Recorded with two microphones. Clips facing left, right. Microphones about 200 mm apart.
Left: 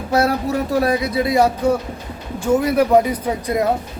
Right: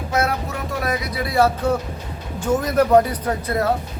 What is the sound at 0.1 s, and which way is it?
Speech, 35° left (ahead or behind).